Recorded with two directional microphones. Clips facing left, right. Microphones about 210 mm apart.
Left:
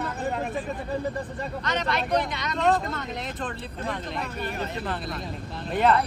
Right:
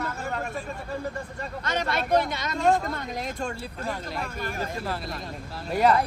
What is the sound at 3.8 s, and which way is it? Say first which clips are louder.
Speech: left 1 dB; centre (ahead or behind).